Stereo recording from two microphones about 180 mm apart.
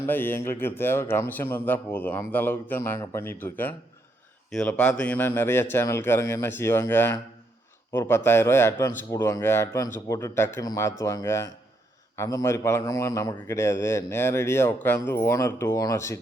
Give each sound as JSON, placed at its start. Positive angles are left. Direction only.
{"t": 0.0, "sound": "a man's voice", "side_deg": 10}